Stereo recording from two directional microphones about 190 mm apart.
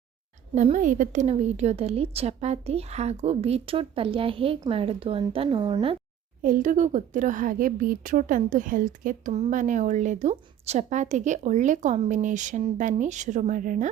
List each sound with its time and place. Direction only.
0.5 s a woman's voice: 40° right (ahead or behind)
6.4 s a woman's voice: 45° right (ahead or behind)